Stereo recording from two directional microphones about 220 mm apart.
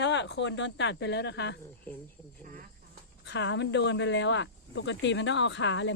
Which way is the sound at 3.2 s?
55° left (ahead or behind).